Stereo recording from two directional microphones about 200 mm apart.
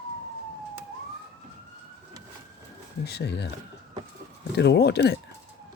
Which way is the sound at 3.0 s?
55° left (ahead or behind).